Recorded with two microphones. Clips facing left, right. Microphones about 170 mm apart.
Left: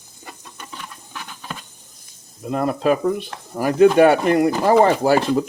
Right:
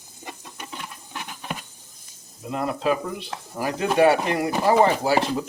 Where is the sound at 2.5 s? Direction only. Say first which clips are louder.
Left 5 dB; 55° left (ahead or behind).